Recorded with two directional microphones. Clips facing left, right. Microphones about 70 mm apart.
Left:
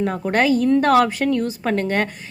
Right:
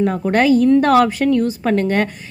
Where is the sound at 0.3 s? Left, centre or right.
Left.